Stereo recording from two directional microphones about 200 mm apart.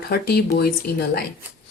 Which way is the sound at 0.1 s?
50° left (ahead or behind).